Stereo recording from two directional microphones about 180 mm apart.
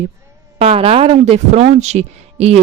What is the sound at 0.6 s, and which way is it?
A woman's voice, 35° right (ahead or behind).